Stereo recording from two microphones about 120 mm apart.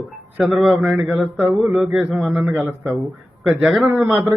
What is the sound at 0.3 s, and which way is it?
Speech, 5° right (ahead or behind).